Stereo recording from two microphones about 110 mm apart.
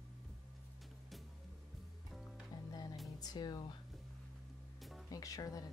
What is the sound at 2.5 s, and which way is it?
Music, 40° left (ahead or behind).